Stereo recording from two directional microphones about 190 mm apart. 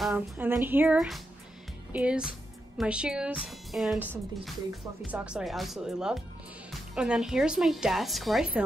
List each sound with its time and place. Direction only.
0.0 s a woman's voice: 10° right (ahead or behind)